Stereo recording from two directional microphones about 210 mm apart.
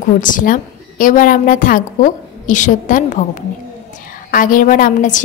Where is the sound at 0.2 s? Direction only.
40° left (ahead or behind).